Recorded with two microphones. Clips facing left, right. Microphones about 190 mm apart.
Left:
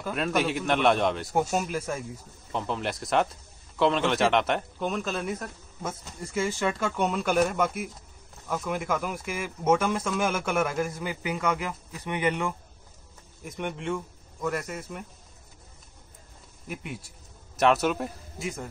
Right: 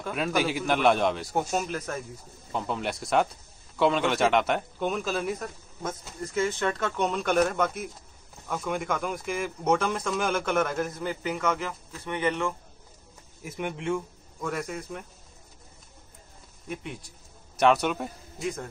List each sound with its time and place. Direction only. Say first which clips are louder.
0.0 s speech: even; centre (ahead or behind)
13.4 s a man's voice: even; 5° right (ahead or behind)
16.6 s speech: right 1 dB; 5° left (ahead or behind)